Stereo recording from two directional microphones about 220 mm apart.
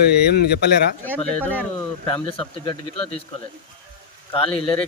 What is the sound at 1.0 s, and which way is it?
Speech, 5° left (ahead or behind).